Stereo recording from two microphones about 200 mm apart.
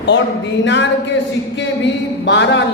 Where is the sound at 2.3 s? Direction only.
60° left (ahead or behind).